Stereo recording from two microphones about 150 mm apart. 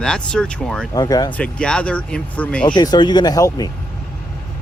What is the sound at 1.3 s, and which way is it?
Speech, 10° left (ahead or behind).